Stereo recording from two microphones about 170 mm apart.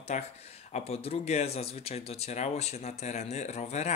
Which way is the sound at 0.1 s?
45° left (ahead or behind).